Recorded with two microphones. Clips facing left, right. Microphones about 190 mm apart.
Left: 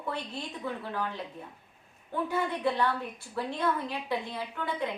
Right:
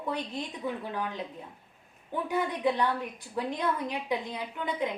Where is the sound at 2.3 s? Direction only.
15° right (ahead or behind).